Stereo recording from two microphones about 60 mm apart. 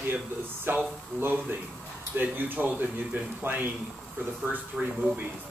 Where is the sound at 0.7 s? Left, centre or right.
Right.